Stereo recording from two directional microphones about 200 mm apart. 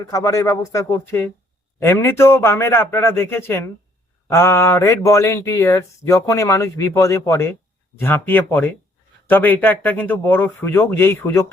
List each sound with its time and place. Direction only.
0.0 s speech: 15° left (ahead or behind)